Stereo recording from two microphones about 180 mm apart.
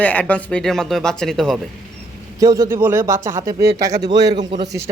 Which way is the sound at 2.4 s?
20° right (ahead or behind).